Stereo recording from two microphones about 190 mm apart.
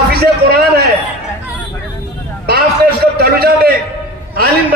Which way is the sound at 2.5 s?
55° right (ahead or behind).